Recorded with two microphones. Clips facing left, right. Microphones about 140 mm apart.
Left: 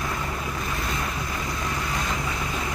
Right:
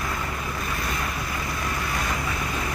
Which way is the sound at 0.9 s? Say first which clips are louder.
Even; 20° left (ahead or behind).